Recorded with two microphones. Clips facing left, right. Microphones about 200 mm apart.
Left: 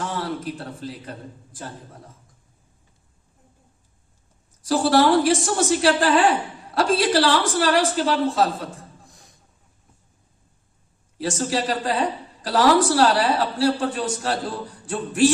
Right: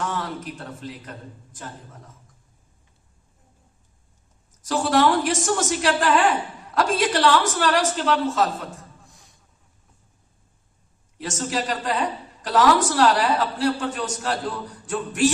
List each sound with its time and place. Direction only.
0.0 s a man's voice: 30° left (ahead or behind)
4.6 s a woman's voice: 35° left (ahead or behind)
11.2 s a woman's voice: 35° left (ahead or behind)